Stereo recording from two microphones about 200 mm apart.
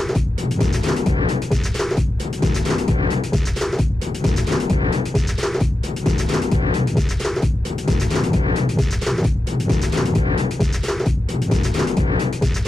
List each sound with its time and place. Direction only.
0.0 s music: centre (ahead or behind)
1.1 s music: 25° right (ahead or behind)
1.5 s music: centre (ahead or behind)